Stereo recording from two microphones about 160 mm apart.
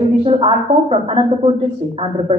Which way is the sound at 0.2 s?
35° right (ahead or behind).